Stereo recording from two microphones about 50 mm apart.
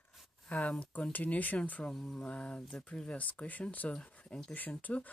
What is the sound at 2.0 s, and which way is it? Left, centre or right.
Speech, centre.